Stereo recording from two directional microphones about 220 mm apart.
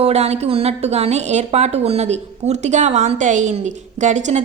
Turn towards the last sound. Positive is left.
turn(degrees=-30)  # may be behind; listen again after turning